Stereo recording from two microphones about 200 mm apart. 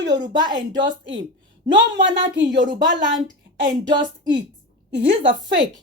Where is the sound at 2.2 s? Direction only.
60° right (ahead or behind).